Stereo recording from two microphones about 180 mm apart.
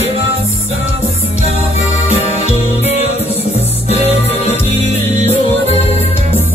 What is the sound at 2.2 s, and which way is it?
Music, 35° left (ahead or behind).